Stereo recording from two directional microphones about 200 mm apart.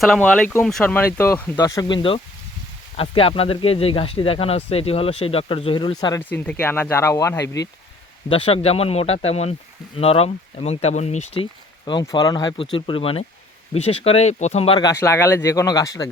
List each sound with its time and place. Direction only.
0.0 s speech: 5° left (ahead or behind); by 6.2 s 20° left (ahead or behind)
6.2 s speech: 10° left (ahead or behind)
8.3 s speech: 30° left (ahead or behind)
11.9 s speech: 20° left (ahead or behind)